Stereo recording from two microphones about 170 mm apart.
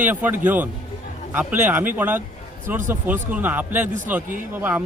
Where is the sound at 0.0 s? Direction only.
10° right (ahead or behind).